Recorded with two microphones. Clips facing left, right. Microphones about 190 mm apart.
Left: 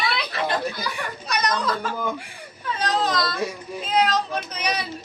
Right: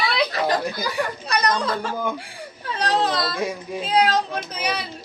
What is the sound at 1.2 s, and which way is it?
Speech, 30° right (ahead or behind).